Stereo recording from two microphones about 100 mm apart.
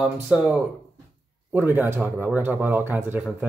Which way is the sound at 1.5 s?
20° right (ahead or behind).